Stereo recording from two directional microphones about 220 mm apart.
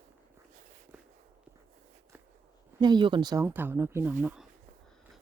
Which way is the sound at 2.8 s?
20° right (ahead or behind).